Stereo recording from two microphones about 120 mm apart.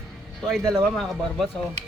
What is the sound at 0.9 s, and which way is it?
Speech, centre (ahead or behind).